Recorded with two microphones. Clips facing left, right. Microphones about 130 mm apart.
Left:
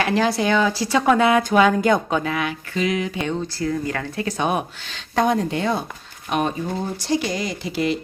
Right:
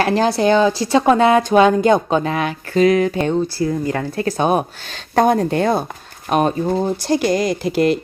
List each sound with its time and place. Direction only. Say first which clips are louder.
0.0 s speech: right 4 dB; 35° right (ahead or behind)
3.6 s speech: right 4 dB; 25° right (ahead or behind)
4.2 s speech: right 5 dB; 35° right (ahead or behind)